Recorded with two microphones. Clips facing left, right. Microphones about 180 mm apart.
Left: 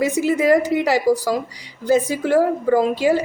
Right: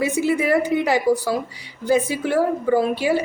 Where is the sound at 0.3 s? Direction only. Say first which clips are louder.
Left 3 dB; 40° left (ahead or behind).